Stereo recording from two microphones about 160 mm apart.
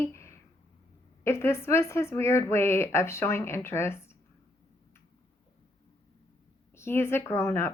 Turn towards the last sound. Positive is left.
turn(degrees=15)  # may be behind; listen again after turning